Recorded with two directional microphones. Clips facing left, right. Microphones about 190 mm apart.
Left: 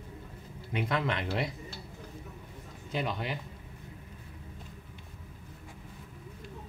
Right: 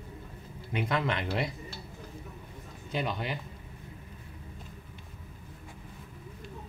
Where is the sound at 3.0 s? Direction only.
20° right (ahead or behind).